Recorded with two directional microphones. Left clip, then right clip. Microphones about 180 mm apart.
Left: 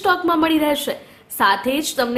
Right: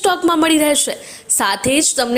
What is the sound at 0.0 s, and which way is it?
A woman's voice, 40° right (ahead or behind).